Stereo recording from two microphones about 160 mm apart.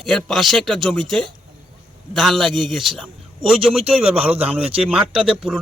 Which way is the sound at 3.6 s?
40° right (ahead or behind).